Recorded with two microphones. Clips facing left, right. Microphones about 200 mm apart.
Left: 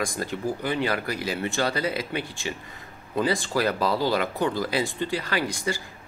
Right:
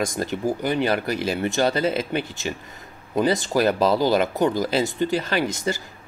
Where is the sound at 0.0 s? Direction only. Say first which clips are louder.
Right 4 dB; 25° right (ahead or behind).